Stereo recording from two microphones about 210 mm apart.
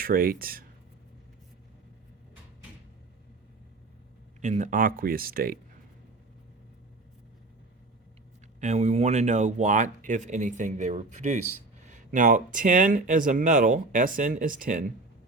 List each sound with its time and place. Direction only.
0.0 s speech: 40° right (ahead or behind)
4.4 s speech: 35° right (ahead or behind)
8.6 s speech: 30° right (ahead or behind)